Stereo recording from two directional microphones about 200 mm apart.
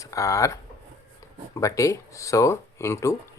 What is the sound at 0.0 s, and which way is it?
Speech, 15° left (ahead or behind).